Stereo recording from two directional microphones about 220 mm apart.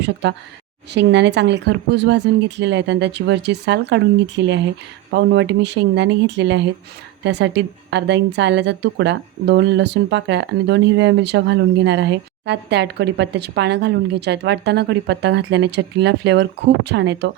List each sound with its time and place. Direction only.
0.0 s a woman's voice: 50° right (ahead or behind)